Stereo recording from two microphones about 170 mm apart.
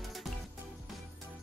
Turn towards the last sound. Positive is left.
turn(degrees=0)  # may be behind; listen again after turning